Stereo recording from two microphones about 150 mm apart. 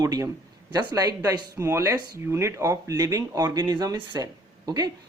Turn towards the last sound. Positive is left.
turn(degrees=-25)  # may be behind; listen again after turning